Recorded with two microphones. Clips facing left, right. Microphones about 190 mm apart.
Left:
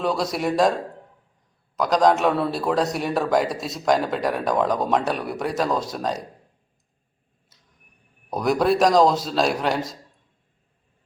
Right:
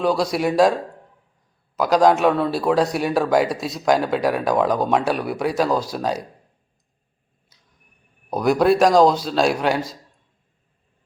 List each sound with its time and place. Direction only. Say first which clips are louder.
0.0 s a man's voice: right 4 dB; centre (ahead or behind)
8.3 s a man's voice: right 3 dB; centre (ahead or behind)